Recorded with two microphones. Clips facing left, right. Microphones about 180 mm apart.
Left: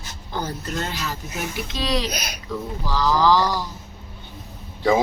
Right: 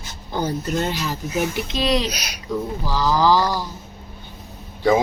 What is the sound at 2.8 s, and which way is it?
Speech, 10° right (ahead or behind).